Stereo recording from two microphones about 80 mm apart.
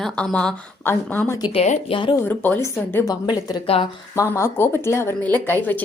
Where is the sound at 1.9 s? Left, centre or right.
Left.